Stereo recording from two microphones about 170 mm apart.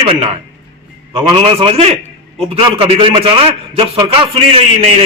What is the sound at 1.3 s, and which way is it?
A man's voice, 30° right (ahead or behind).